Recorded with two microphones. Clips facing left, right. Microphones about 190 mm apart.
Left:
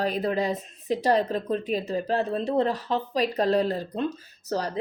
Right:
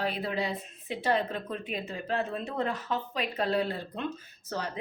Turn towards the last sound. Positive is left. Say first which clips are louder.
# left 6 dB
turn(degrees=40)  # may be behind; listen again after turning